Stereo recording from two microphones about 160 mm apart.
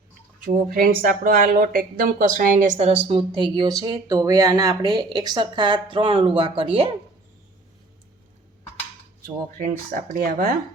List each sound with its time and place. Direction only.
0.4 s speech: 65° right (ahead or behind); by 3.0 s 45° right (ahead or behind)
3.1 s speech: 30° right (ahead or behind)
9.2 s speech: 60° right (ahead or behind)